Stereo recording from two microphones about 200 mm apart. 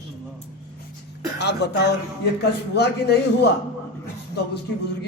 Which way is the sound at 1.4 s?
60° left (ahead or behind).